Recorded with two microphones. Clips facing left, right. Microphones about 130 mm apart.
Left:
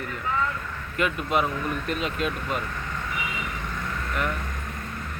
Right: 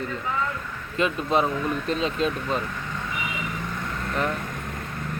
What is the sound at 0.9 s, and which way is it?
Speech, 25° right (ahead or behind).